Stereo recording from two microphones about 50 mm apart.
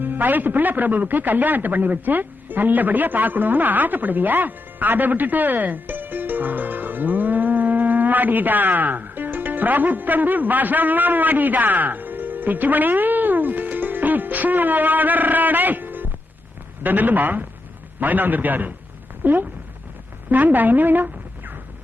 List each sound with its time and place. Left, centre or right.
0.0 s a man's voice: right